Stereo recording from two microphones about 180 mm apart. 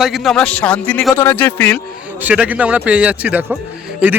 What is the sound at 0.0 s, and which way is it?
A man's voice, centre (ahead or behind).